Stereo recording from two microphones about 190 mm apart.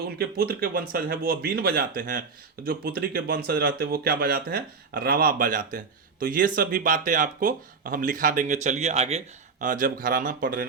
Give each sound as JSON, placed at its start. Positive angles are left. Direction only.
{"t": 0.2, "sound": "speech", "side_deg": -55}